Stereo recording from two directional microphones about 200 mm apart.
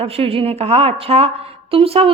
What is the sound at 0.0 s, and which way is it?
A woman's voice, 30° right (ahead or behind).